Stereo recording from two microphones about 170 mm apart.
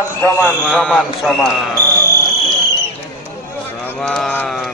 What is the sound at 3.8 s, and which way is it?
Speech, 5° left (ahead or behind).